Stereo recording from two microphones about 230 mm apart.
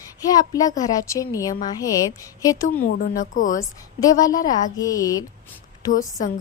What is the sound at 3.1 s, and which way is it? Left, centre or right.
Speech, left.